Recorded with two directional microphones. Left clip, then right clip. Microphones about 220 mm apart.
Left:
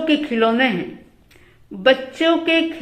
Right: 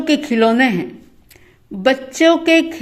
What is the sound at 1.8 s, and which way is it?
Speech, 45° right (ahead or behind).